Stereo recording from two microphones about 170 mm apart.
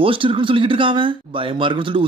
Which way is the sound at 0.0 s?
30° right (ahead or behind).